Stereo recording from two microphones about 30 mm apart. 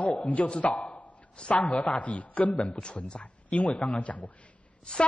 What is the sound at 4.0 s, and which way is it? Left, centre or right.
Speech, left.